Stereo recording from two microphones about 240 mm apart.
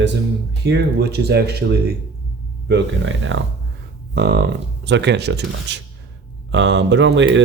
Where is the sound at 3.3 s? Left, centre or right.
Right.